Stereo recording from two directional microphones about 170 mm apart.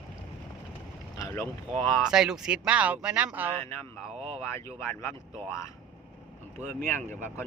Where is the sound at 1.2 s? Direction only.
15° left (ahead or behind).